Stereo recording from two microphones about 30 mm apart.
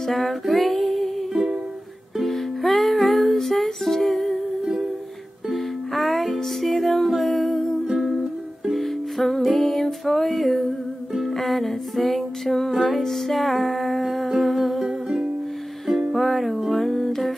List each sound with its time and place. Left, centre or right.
0.0 s music: centre
1.3 s music: centre
2.1 s music: centre
5.5 s music: centre
16.1 s music: centre
16.7 s humming: centre